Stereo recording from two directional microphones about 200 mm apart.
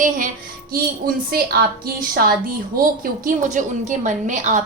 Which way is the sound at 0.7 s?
50° right (ahead or behind).